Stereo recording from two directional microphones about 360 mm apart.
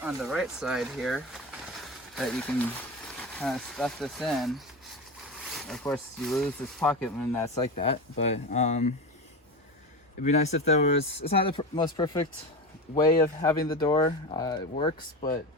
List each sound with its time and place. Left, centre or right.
0.0 s speech: centre
10.2 s speech: centre